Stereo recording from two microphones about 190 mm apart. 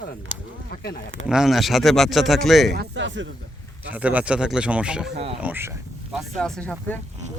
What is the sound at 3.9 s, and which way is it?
Speech, 10° right (ahead or behind).